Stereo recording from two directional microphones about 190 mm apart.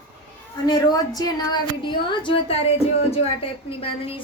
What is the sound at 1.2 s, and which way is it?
A woman's voice, 20° left (ahead or behind).